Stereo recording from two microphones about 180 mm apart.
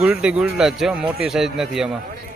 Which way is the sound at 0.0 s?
5° right (ahead or behind).